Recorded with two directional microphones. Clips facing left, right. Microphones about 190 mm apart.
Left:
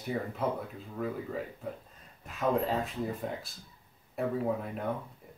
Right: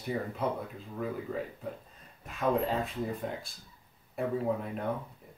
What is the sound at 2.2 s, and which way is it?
Speech, centre (ahead or behind).